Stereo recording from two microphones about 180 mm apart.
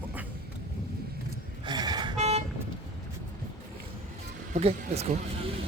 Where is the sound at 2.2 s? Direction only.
35° right (ahead or behind).